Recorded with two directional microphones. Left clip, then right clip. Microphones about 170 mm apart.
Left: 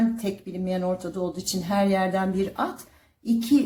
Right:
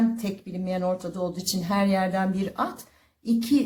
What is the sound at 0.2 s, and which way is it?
Speech, 25° right (ahead or behind).